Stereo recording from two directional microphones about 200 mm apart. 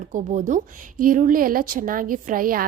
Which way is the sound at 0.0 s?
40° right (ahead or behind).